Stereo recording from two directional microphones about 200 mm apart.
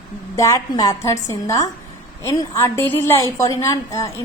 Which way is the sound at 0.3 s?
15° left (ahead or behind).